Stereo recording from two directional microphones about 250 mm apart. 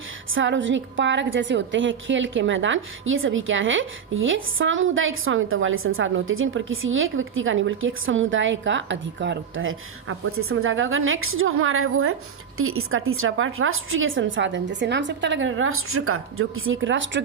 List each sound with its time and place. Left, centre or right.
0.3 s a woman's voice: right